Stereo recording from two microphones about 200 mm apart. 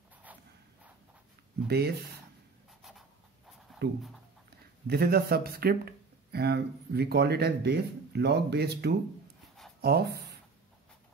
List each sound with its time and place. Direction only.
1.7 s speech: 50° right (ahead or behind)
2.8 s writing: centre (ahead or behind)
3.8 s speech: 50° right (ahead or behind)